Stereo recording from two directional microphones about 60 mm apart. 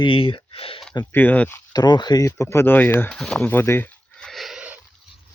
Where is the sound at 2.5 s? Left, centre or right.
Left.